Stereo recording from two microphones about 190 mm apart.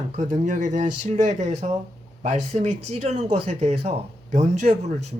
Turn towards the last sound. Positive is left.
turn(degrees=-35)  # may be behind; listen again after turning